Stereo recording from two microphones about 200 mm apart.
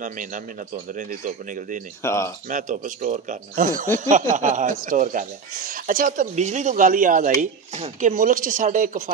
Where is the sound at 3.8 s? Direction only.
10° left (ahead or behind).